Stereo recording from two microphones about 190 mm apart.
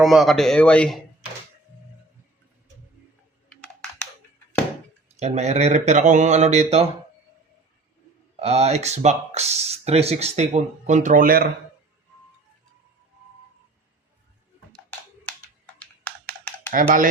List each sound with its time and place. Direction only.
0.0 s speech: centre (ahead or behind)
5.1 s speech: 35° right (ahead or behind)
8.4 s speech: 35° right (ahead or behind); by 11.4 s 50° right (ahead or behind)
16.0 s a sound: 10° left (ahead or behind)
16.7 s speech: 45° right (ahead or behind)